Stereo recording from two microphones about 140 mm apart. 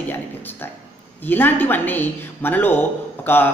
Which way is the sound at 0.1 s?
15° left (ahead or behind).